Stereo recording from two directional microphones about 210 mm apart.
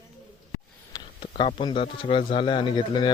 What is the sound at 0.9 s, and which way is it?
Speech, 25° left (ahead or behind).